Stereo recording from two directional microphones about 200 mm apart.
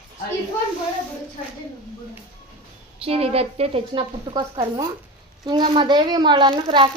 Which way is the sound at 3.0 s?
30° right (ahead or behind).